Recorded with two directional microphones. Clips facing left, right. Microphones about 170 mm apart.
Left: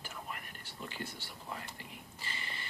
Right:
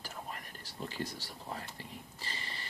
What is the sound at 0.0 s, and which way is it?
Whispering, 35° right (ahead or behind).